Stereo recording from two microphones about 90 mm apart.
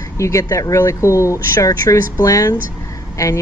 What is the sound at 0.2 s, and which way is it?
Speech, 35° left (ahead or behind).